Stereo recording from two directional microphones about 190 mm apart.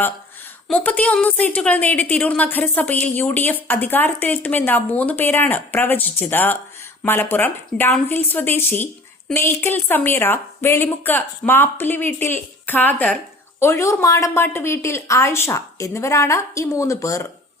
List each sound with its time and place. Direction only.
0.7 s a woman's voice: 10° left (ahead or behind)